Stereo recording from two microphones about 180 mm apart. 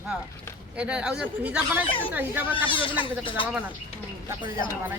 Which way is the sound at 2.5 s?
30° left (ahead or behind).